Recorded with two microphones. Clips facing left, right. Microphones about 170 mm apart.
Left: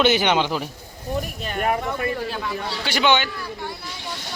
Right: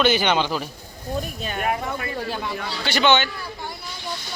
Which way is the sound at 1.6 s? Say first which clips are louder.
Left 3 dB; 40° left (ahead or behind).